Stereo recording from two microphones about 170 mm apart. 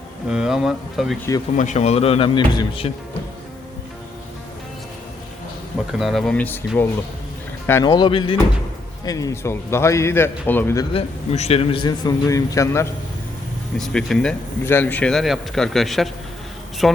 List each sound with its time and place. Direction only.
0.3 s speech: 5° right (ahead or behind)
1.5 s speech: 45° left (ahead or behind)
5.9 s speech: centre (ahead or behind)
7.9 s a man's voice: 30° left (ahead or behind); by 10.8 s 15° left (ahead or behind)
10.9 s a man's voice: 40° left (ahead or behind); by 12.9 s 15° left (ahead or behind)
13.7 s speech: centre (ahead or behind)